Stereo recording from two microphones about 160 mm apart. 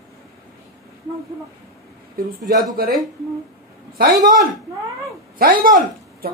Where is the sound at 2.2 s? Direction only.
70° right (ahead or behind).